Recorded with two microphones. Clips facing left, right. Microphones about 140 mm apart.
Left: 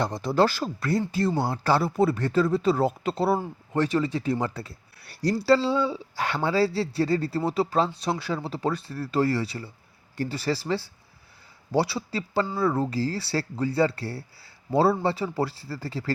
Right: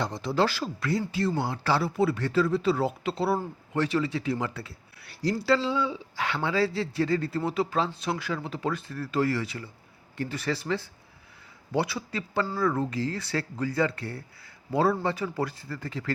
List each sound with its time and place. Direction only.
0.0 s speech: 45° left (ahead or behind)